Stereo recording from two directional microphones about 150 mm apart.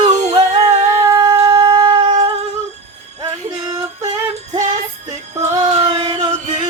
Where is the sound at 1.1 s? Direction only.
30° right (ahead or behind).